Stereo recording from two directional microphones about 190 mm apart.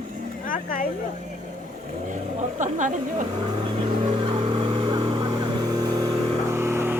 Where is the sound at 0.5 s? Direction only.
45° left (ahead or behind).